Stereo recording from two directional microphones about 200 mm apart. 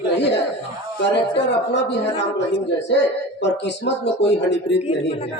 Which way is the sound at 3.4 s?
60° left (ahead or behind).